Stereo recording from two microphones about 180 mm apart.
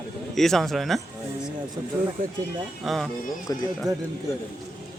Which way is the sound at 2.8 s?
Centre (ahead or behind).